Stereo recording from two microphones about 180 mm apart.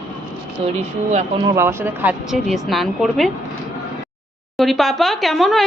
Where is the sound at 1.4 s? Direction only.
15° right (ahead or behind).